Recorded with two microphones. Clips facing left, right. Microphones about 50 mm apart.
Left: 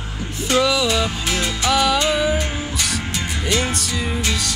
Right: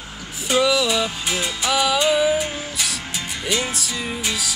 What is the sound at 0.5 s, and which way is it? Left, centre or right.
Music, centre.